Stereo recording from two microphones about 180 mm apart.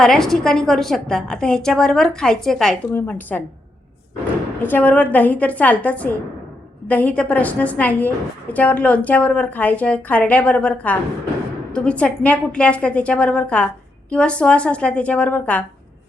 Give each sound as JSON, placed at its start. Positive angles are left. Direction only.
{"t": 0.0, "sound": "a woman's voice", "side_deg": 0}
{"t": 4.6, "sound": "a woman's voice", "side_deg": 10}